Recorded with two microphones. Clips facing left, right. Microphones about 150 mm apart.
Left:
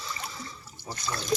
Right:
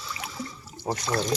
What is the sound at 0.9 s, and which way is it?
Speech, 60° right (ahead or behind).